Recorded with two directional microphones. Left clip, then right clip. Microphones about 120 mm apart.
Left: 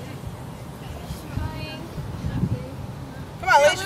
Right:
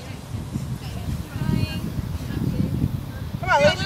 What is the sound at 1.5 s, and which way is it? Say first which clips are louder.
Vehicle: right 5 dB; 45° right (ahead or behind).